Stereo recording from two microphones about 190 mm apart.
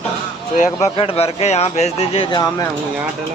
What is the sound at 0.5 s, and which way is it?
Speech, 40° left (ahead or behind).